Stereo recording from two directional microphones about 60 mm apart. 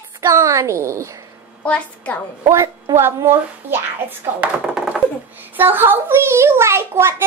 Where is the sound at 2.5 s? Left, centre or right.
Right.